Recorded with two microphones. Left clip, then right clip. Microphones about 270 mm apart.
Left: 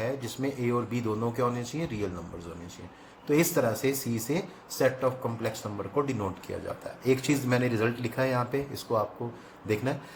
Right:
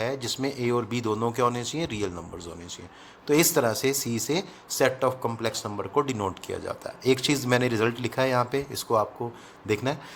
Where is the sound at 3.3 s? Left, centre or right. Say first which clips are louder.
Right 3 dB; right.